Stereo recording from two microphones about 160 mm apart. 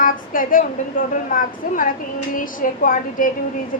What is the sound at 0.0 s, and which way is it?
A woman's voice, 60° left (ahead or behind).